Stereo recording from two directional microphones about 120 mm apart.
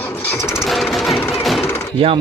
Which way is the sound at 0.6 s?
Centre (ahead or behind).